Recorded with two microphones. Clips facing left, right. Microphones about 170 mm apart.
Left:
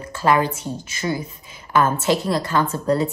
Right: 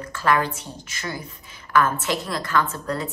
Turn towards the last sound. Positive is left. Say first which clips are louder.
# left 7 dB
turn(degrees=30)  # may be behind; listen again after turning